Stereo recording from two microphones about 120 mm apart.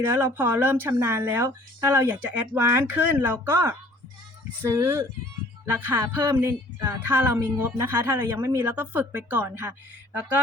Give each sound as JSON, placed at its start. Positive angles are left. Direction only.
{"t": 0.1, "sound": "speech", "side_deg": -15}